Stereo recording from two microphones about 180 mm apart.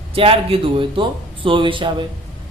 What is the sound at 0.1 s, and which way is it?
Speech, 30° right (ahead or behind).